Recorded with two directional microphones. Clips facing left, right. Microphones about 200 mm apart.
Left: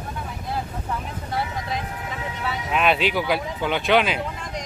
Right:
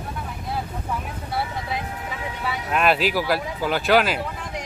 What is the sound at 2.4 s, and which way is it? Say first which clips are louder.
Speech: right 1 dB; centre (ahead or behind).